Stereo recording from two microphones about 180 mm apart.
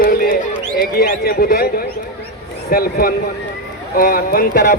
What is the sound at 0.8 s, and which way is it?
Speech, 55° left (ahead or behind).